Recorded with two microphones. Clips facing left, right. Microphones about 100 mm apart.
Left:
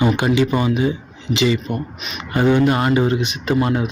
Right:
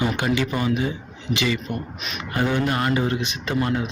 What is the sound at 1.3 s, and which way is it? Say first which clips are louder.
Speech: left 6 dB; 25° left (ahead or behind).